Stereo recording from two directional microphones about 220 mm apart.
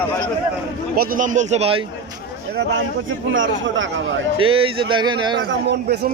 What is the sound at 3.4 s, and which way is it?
Speech, 60° right (ahead or behind).